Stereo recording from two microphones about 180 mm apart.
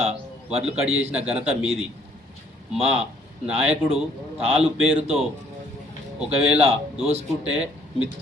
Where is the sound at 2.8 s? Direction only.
35° right (ahead or behind).